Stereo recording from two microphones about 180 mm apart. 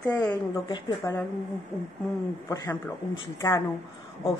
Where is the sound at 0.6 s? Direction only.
25° left (ahead or behind).